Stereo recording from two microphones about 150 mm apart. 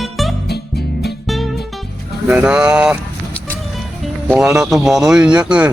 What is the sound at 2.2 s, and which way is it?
Speech, 10° right (ahead or behind).